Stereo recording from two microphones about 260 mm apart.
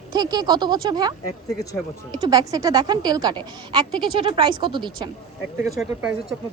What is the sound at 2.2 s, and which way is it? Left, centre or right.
A woman's voice, centre.